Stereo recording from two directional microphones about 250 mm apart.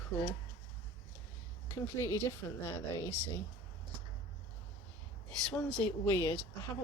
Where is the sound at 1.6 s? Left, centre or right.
Centre.